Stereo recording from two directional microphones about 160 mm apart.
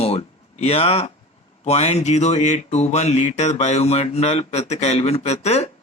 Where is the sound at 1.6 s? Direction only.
45° left (ahead or behind).